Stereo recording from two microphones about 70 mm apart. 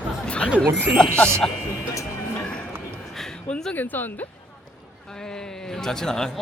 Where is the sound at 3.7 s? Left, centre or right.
Left.